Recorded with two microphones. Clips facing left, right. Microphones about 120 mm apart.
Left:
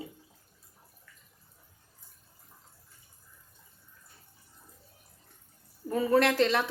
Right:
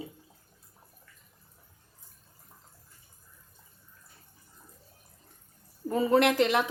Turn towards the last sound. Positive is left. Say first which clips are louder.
# right 1 dB
turn(degrees=-15)  # may be behind; listen again after turning